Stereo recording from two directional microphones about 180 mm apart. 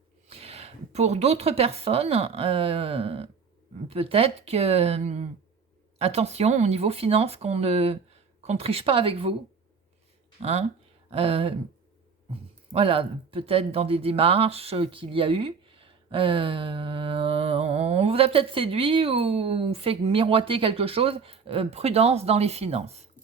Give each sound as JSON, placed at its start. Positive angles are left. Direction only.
{"t": 0.3, "sound": "a woman's voice", "side_deg": -35}
{"t": 10.4, "sound": "speech", "side_deg": -35}
{"t": 12.7, "sound": "speech", "side_deg": -30}